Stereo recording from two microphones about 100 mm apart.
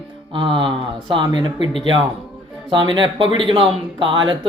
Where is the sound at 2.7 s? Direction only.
50° right (ahead or behind).